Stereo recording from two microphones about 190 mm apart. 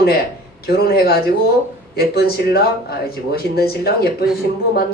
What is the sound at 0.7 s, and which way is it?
Speech, 55° left (ahead or behind).